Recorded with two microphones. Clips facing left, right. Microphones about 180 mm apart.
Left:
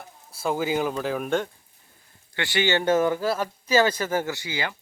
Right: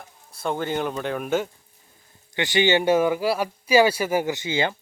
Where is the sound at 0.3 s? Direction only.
5° left (ahead or behind).